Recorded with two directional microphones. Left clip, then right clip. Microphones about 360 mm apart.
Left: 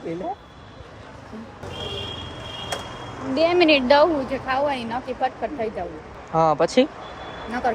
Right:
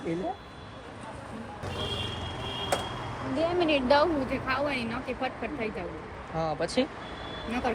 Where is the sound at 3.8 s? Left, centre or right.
Centre.